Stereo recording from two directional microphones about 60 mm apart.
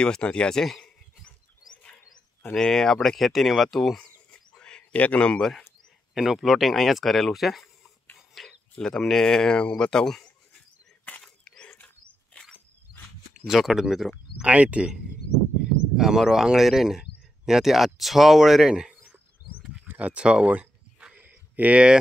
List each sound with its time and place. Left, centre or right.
0.0 s speech: centre
2.5 s speech: centre
4.0 s bird: centre
6.1 s speech: centre
8.4 s speech: centre
11.1 s a sound: centre
13.5 s speech: centre
14.4 s speech: right
16.0 s speech: centre
19.9 s a sound: right